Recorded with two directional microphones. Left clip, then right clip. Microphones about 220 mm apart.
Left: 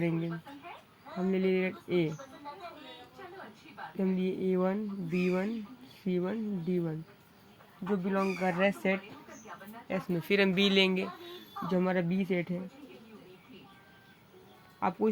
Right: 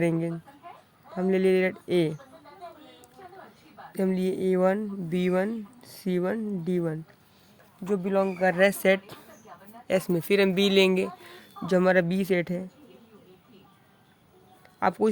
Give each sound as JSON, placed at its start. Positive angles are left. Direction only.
{"t": 1.3, "sound": "speech", "side_deg": -50}
{"t": 3.9, "sound": "speech", "side_deg": -50}
{"t": 10.2, "sound": "speech", "side_deg": -25}
{"t": 11.7, "sound": "speech", "side_deg": -50}
{"t": 14.8, "sound": "speech", "side_deg": -50}